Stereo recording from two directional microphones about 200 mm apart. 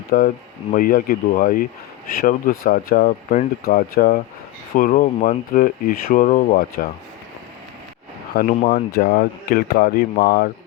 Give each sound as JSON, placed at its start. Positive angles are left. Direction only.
{"t": 0.1, "sound": "speech", "side_deg": 45}
{"t": 8.4, "sound": "speech", "side_deg": 45}